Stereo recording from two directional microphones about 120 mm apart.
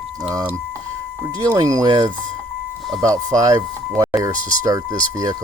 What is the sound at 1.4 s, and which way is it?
Speech, 30° right (ahead or behind).